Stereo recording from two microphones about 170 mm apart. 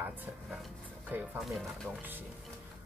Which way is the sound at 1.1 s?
10° right (ahead or behind).